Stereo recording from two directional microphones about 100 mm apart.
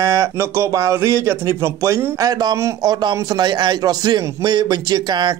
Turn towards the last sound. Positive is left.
turn(degrees=-45)  # may be behind; listen again after turning